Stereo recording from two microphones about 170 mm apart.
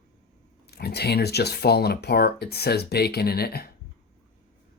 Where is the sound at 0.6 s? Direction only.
70° left (ahead or behind).